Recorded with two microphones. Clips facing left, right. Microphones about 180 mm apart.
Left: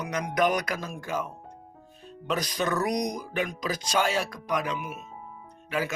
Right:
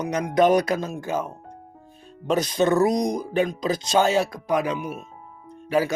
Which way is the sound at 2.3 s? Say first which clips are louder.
Right 8 dB; 25° right (ahead or behind).